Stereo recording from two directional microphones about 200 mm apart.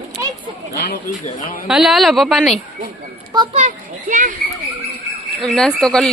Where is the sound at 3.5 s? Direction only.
40° right (ahead or behind).